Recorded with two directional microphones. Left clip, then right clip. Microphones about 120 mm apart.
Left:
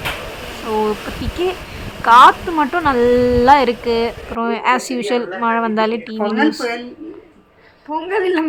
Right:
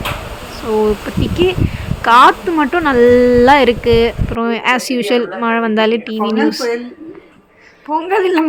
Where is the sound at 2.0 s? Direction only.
30° right (ahead or behind).